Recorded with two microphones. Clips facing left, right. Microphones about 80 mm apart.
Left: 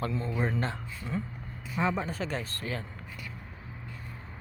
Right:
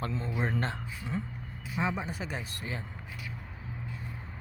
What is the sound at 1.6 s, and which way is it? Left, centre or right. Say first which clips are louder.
Speech: left 3 dB; centre.